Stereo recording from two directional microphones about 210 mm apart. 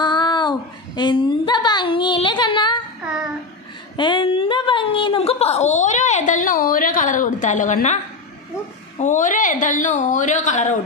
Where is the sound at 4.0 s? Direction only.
20° left (ahead or behind).